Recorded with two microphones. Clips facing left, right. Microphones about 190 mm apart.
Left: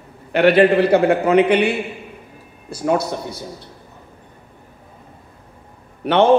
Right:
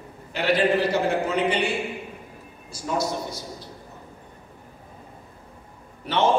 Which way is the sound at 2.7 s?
60° left (ahead or behind).